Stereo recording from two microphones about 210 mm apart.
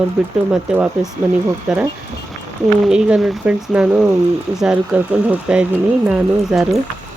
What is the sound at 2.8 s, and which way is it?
Speech, 5° right (ahead or behind).